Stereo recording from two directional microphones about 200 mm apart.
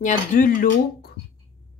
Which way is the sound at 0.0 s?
40° left (ahead or behind).